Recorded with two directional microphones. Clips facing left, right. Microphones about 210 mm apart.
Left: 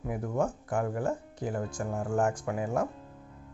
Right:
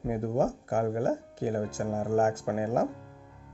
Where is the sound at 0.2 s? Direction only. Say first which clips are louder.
Right 1 dB; 25° right (ahead or behind).